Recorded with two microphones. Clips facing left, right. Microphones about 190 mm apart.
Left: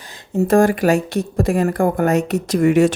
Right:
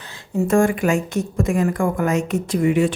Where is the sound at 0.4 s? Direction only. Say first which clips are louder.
Left 3 dB; 35° left (ahead or behind).